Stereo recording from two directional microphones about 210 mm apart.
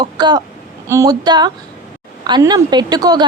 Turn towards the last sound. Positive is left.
turn(degrees=-20)  # may be behind; listen again after turning